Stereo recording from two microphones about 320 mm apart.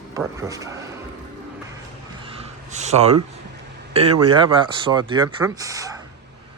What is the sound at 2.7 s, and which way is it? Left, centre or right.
Speech, right.